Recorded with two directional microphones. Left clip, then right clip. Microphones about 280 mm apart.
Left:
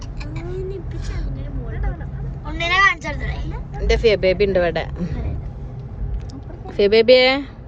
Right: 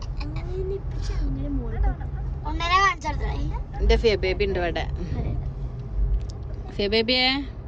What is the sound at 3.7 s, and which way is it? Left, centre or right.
Speech, centre.